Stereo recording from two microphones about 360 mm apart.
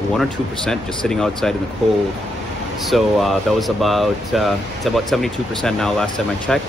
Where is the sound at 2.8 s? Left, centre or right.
Centre.